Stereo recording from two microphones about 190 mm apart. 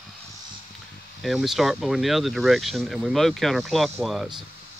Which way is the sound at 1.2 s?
Centre (ahead or behind).